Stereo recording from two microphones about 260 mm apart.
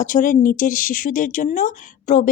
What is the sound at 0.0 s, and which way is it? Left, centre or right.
Speech, left.